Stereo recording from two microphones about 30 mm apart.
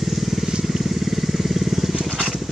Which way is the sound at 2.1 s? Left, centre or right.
Right.